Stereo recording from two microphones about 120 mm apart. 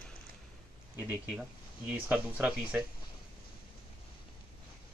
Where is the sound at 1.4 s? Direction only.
10° right (ahead or behind).